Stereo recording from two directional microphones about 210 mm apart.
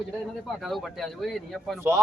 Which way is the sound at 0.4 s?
Centre (ahead or behind).